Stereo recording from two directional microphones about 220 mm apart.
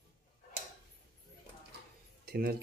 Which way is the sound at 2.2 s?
45° right (ahead or behind).